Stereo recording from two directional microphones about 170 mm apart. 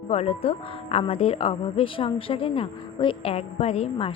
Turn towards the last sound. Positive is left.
turn(degrees=35)  # may be behind; listen again after turning